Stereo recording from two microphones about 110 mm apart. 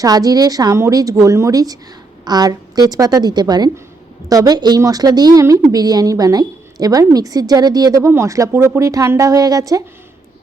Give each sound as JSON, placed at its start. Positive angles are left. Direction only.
{"t": 0.0, "sound": "a woman's voice", "side_deg": -35}